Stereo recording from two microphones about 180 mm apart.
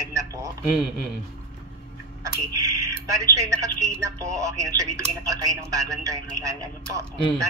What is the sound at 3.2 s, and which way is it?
Speech, 15° right (ahead or behind).